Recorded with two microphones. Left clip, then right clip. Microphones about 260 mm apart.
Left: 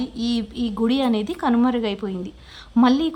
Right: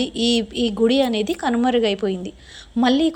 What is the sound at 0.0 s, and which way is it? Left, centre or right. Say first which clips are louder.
A woman's voice: right 6 dB; centre.